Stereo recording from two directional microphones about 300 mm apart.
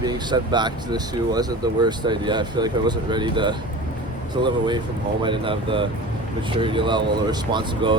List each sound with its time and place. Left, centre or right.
0.0 s speech: centre